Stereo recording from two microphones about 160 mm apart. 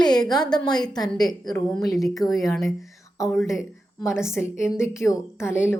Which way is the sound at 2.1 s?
20° left (ahead or behind).